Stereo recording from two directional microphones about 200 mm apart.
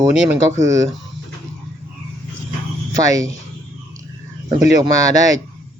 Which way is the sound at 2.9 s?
15° right (ahead or behind).